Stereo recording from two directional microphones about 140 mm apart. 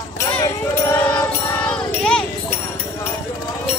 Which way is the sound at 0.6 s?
15° left (ahead or behind).